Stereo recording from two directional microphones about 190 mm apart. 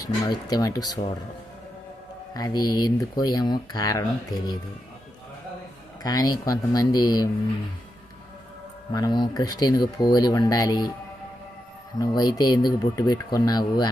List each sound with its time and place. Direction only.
0.0 s speech: 20° left (ahead or behind)
2.3 s speech: 20° left (ahead or behind)
6.0 s speech: 20° left (ahead or behind)
8.9 s speech: 20° left (ahead or behind)
11.9 s speech: 20° left (ahead or behind)